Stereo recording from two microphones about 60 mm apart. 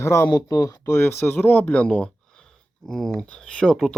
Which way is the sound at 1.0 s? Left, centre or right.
Left.